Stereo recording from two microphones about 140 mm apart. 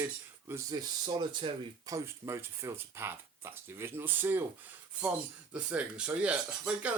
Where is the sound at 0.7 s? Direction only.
30° right (ahead or behind).